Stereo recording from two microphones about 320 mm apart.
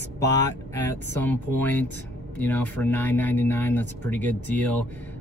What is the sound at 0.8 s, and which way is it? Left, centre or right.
Speech, centre.